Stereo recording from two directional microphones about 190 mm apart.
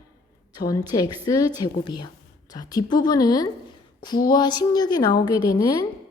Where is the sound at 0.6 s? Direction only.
20° left (ahead or behind).